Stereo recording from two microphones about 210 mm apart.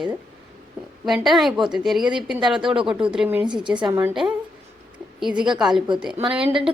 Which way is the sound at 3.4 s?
20° right (ahead or behind).